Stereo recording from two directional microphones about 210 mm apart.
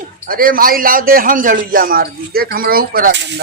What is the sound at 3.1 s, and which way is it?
Speech, 55° right (ahead or behind).